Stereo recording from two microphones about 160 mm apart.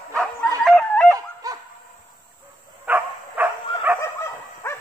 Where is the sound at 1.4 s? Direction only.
20° right (ahead or behind).